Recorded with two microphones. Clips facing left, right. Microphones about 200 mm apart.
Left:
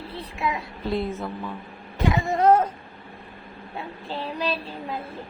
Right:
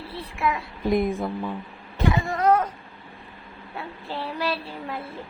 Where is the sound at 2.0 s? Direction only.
20° left (ahead or behind).